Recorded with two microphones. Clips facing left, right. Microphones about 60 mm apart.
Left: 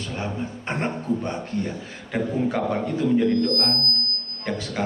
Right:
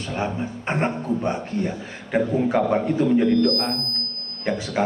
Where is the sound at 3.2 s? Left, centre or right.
Right.